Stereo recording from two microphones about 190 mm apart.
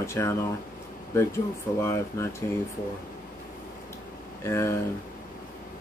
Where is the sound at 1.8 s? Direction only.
15° left (ahead or behind).